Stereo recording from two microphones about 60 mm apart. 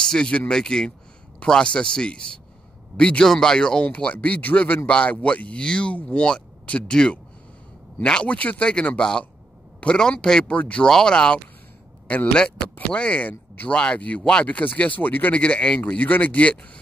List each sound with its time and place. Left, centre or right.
0.0 s speech: centre
3.8 s a man's voice: left
12.7 s speech: left